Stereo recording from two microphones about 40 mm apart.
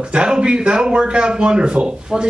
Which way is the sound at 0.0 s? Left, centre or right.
Right.